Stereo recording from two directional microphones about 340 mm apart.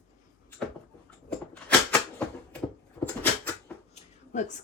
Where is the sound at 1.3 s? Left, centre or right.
Centre.